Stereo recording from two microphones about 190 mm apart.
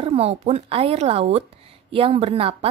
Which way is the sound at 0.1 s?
35° right (ahead or behind).